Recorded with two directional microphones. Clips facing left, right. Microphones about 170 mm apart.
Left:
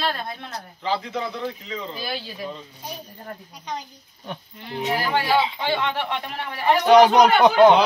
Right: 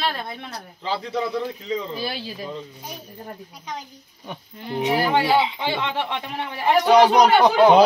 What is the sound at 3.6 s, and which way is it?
Speech, 10° right (ahead or behind).